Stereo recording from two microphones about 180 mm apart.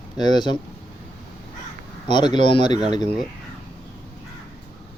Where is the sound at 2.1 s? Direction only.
25° left (ahead or behind).